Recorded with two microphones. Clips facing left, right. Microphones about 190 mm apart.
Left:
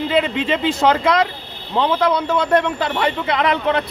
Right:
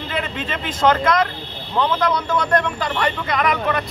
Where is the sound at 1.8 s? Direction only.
25° left (ahead or behind).